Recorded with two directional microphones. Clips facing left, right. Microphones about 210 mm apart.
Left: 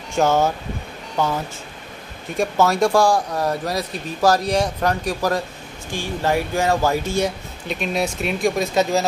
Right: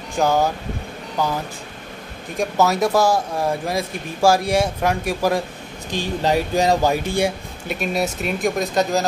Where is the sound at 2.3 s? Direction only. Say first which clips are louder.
Even; centre (ahead or behind).